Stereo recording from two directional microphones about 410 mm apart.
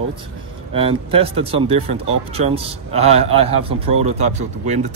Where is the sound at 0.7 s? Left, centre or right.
Centre.